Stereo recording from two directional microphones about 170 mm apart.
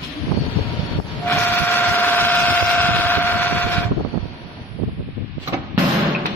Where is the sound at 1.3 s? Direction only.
10° left (ahead or behind).